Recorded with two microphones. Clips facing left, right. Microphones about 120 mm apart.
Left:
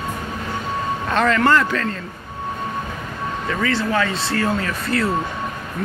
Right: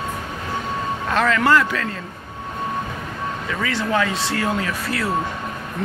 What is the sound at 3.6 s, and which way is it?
Speech, 15° right (ahead or behind).